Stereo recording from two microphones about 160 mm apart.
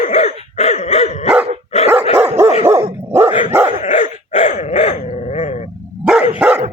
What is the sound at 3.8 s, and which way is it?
Dog, 50° left (ahead or behind).